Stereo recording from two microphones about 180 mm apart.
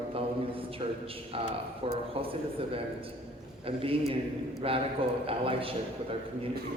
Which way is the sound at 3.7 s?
30° right (ahead or behind).